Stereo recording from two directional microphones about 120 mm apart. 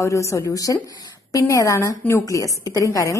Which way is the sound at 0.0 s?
25° left (ahead or behind).